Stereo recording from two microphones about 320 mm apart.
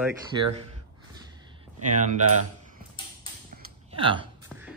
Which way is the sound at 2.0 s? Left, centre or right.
Right.